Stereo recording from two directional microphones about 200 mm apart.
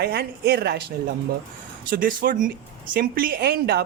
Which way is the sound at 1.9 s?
45° right (ahead or behind).